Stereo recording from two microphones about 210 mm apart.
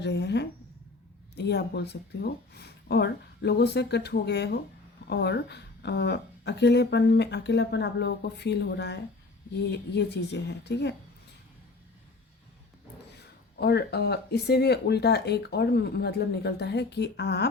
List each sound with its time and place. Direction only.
0.0 s a woman's voice: 55° left (ahead or behind)
13.6 s a woman's voice: 50° left (ahead or behind)